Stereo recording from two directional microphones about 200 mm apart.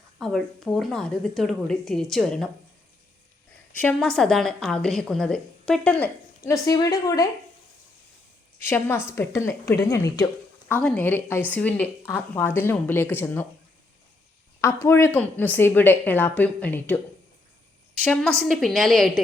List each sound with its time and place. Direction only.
0.2 s a woman's voice: centre (ahead or behind)
3.8 s a woman's voice: 5° left (ahead or behind)
8.6 s a woman's voice: 10° left (ahead or behind)
14.6 s a woman's voice: 15° left (ahead or behind)
18.0 s a woman's voice: 5° left (ahead or behind)